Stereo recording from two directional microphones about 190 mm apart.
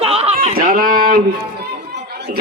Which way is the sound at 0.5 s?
50° right (ahead or behind).